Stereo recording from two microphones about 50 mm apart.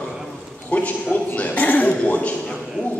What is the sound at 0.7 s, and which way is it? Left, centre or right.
A man's voice, left.